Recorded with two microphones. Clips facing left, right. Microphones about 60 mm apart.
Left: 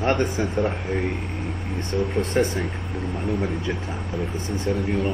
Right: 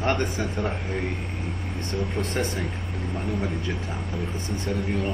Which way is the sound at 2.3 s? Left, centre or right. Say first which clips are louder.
Left 7 dB; left.